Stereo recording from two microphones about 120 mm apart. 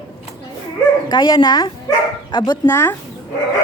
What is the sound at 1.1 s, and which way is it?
Speech, 40° left (ahead or behind).